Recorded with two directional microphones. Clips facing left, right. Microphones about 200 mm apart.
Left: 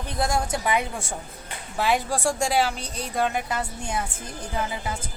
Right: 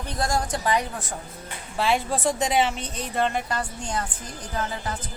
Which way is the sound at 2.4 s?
5° right (ahead or behind).